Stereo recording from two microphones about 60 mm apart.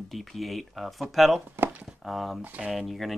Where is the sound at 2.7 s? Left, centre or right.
Centre.